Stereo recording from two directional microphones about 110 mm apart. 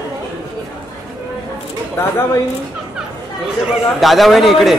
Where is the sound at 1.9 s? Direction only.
25° left (ahead or behind).